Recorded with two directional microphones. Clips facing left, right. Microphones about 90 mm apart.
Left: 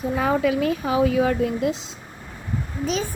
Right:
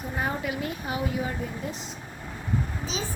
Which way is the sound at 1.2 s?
90° left.